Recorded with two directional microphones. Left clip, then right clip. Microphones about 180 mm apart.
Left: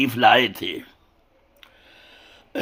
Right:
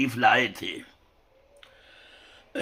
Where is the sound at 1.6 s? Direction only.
30° left (ahead or behind).